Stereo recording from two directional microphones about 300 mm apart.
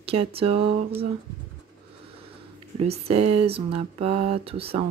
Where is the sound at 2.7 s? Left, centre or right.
Centre.